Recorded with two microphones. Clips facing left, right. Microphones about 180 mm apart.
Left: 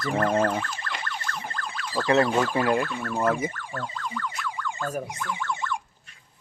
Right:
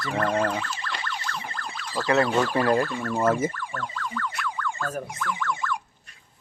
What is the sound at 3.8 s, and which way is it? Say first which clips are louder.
Boing: even; 20° left (ahead or behind).